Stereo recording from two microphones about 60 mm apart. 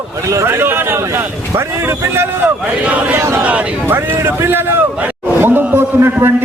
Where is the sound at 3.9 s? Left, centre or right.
Right.